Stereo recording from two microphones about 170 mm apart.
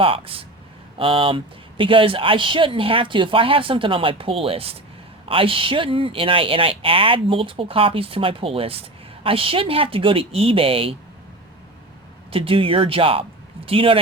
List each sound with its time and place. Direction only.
0.0 s speech: 30° right (ahead or behind)
12.3 s speech: 30° right (ahead or behind)